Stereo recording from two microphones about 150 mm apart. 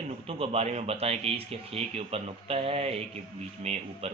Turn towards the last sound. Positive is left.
turn(degrees=-45)  # may be behind; listen again after turning